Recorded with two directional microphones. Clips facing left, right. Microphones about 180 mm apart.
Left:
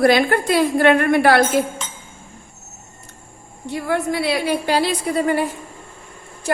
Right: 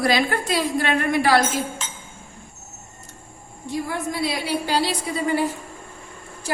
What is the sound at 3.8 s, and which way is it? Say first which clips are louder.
A woman's voice: left 9 dB; 65° left (ahead or behind).